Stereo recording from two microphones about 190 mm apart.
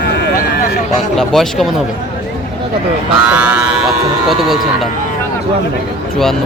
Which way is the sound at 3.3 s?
5° right (ahead or behind).